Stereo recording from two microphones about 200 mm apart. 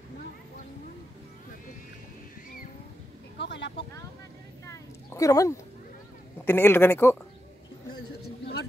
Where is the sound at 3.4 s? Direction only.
60° left (ahead or behind).